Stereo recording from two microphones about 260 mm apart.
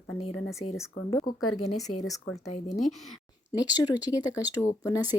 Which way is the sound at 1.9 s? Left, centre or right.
Left.